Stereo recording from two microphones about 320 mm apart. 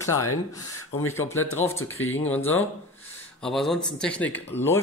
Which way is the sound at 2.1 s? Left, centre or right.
Centre.